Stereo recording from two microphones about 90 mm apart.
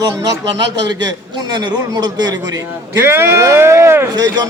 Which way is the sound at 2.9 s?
25° right (ahead or behind).